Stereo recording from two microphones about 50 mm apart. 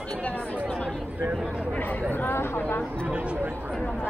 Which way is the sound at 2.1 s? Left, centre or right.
Left.